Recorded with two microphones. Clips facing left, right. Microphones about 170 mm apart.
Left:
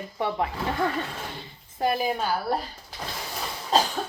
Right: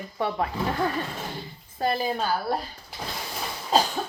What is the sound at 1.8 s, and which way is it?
Speech, 15° left (ahead or behind).